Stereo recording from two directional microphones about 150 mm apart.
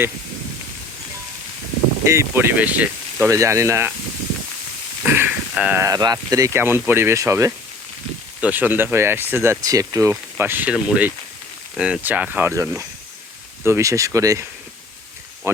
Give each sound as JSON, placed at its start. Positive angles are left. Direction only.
{"t": 2.0, "sound": "speech", "side_deg": -15}
{"t": 5.0, "sound": "speech", "side_deg": -15}
{"t": 5.8, "sound": "speech", "side_deg": -25}
{"t": 15.5, "sound": "speech", "side_deg": -15}